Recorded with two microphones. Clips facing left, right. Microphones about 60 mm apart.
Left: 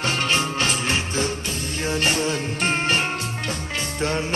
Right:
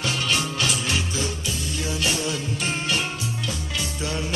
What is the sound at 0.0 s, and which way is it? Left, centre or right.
Music, left.